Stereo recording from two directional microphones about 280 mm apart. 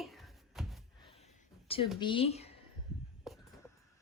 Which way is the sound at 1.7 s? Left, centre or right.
Centre.